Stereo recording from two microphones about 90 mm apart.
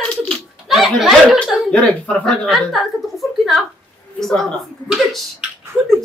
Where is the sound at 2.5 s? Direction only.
Centre (ahead or behind).